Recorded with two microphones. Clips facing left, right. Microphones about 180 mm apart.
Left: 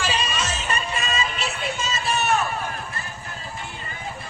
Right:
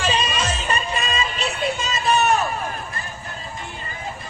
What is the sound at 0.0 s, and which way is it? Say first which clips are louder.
Music: right 3 dB; 35° right (ahead or behind).